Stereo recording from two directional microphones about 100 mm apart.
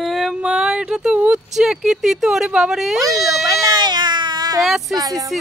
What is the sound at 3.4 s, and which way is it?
Baby cry, 40° right (ahead or behind).